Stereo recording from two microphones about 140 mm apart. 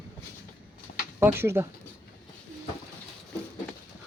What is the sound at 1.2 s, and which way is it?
Speech, 20° right (ahead or behind).